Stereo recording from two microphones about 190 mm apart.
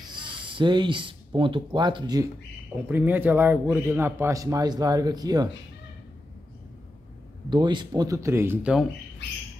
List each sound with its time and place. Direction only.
0.1 s speech: 25° right (ahead or behind)
2.9 s a man's voice: 10° right (ahead or behind)
7.4 s speech: 25° right (ahead or behind)